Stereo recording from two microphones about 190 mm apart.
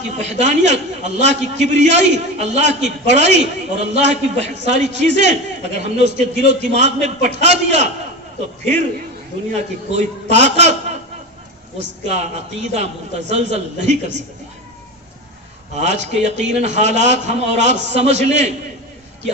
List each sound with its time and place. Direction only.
0.2 s a man's voice: 35° right (ahead or behind)
9.6 s a man's voice: 35° right (ahead or behind)
12.1 s a man's voice: 35° right (ahead or behind)
15.7 s a man's voice: 35° right (ahead or behind)